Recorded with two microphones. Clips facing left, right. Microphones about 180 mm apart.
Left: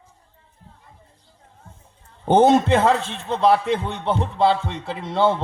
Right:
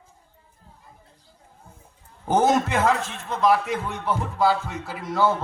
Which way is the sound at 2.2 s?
30° left (ahead or behind).